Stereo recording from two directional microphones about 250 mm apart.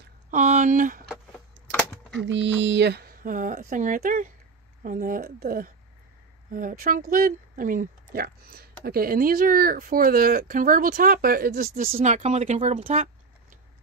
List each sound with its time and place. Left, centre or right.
0.3 s speech: right
2.1 s speech: right